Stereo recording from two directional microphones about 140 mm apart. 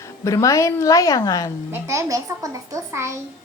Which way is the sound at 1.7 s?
20° right (ahead or behind).